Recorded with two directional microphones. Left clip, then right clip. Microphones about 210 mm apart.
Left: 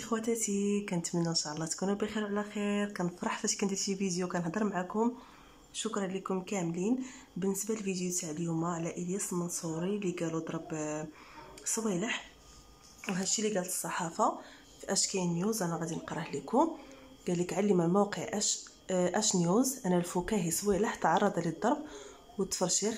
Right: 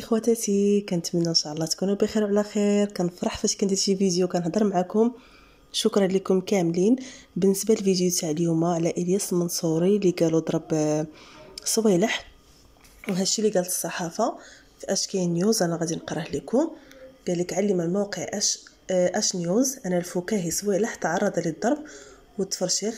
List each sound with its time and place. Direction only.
0.0 s a woman's voice: 15° right (ahead or behind)